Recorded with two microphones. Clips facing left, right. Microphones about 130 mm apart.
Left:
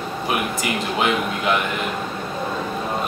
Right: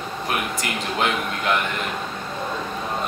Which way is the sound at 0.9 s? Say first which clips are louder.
Left 2 dB; 5° left (ahead or behind).